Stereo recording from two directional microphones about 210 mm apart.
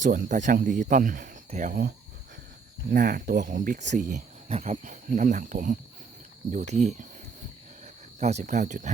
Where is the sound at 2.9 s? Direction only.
40° right (ahead or behind).